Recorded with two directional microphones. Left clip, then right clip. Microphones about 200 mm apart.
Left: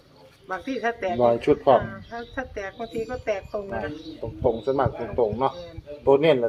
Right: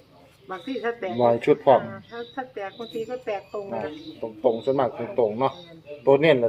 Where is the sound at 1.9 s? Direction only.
35° left (ahead or behind).